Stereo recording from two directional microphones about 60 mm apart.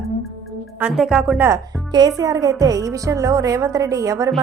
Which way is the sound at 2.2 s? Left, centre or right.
Right.